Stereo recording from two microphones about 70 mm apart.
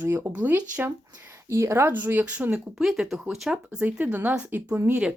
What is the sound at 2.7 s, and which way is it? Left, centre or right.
Speech, centre.